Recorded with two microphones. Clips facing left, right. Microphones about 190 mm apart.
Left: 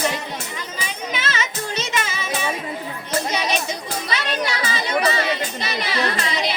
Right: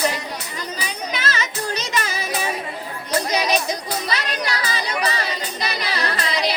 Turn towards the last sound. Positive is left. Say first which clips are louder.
# even
turn(degrees=-35)  # may be behind; listen again after turning